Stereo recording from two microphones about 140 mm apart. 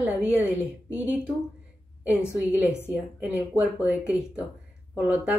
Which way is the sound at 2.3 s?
5° right (ahead or behind).